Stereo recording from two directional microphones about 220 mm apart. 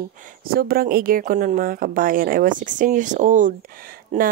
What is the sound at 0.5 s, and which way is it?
A woman's voice, 45° right (ahead or behind).